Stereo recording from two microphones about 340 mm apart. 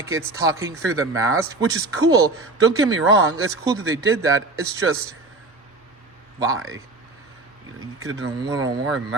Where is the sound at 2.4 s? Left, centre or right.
Right.